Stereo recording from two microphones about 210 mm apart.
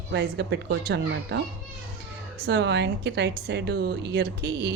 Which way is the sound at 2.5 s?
55° right (ahead or behind).